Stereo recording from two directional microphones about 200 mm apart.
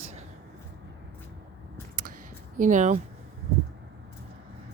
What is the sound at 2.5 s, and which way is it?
Speech, 40° right (ahead or behind).